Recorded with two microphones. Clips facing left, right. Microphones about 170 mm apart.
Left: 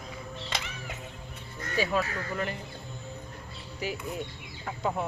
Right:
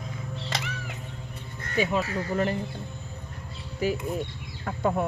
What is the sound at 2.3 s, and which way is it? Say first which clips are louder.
Speech: right 10 dB; 35° right (ahead or behind).